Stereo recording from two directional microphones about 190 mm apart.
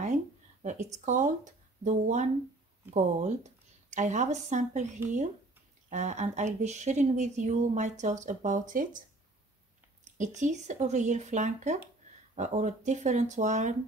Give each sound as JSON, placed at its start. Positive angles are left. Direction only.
{"t": 0.0, "sound": "speech", "side_deg": -40}
{"t": 10.1, "sound": "speech", "side_deg": -40}